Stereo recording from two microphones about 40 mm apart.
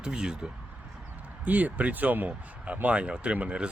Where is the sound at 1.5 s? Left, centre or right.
Right.